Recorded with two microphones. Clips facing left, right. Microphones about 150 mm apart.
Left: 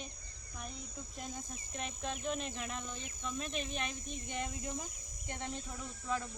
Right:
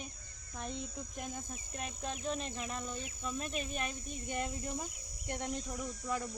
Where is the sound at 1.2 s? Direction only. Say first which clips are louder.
Right 2 dB; 50° right (ahead or behind).